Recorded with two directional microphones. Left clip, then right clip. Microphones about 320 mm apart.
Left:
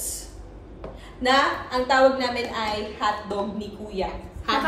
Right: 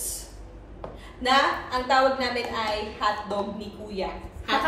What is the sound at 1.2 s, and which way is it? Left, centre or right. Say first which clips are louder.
A woman's voice: left 1 dB; centre.